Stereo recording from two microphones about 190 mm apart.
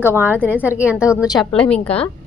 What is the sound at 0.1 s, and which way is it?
A woman's voice, 10° right (ahead or behind).